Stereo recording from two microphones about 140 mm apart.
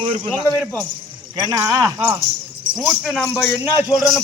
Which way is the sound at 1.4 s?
25° right (ahead or behind).